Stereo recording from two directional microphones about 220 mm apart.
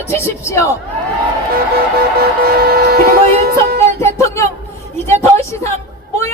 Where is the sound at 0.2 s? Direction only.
10° left (ahead or behind).